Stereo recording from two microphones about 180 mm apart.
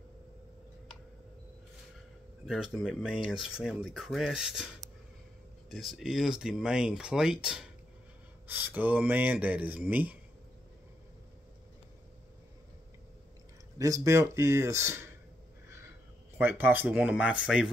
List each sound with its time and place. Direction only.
2.4 s speech: centre (ahead or behind)
13.7 s speech: 20° right (ahead or behind)